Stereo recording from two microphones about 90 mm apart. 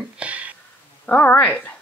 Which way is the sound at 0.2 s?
15° right (ahead or behind).